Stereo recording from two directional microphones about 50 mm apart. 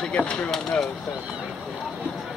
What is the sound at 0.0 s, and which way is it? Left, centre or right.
Speech, left.